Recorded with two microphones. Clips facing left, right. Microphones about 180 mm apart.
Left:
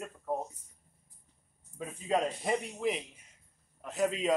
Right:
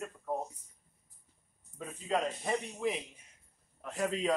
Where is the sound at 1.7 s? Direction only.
15° left (ahead or behind).